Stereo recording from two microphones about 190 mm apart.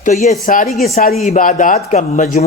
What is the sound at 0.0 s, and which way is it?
A man's voice, 35° left (ahead or behind).